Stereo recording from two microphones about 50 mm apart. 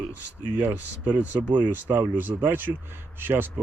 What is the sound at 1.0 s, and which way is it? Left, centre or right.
Speech, right.